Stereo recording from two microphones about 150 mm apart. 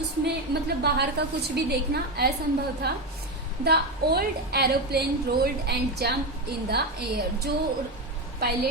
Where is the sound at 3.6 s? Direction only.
90° right.